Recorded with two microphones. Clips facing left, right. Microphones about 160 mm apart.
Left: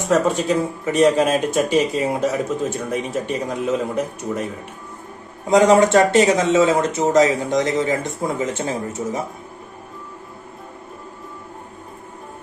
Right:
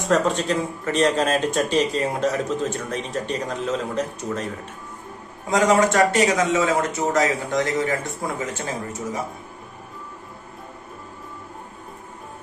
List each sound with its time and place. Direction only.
0.1 s speech: 10° left (ahead or behind)
5.5 s speech: 25° left (ahead or behind)